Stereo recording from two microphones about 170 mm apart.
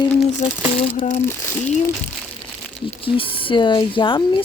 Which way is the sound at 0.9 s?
45° left (ahead or behind).